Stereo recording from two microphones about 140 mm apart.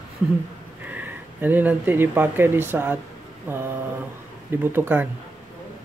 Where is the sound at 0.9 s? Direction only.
10° right (ahead or behind).